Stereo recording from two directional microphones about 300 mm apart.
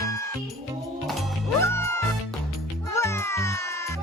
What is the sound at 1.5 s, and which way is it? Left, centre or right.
Music, centre.